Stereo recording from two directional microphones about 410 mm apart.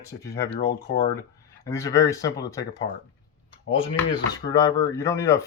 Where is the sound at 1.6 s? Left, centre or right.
Centre.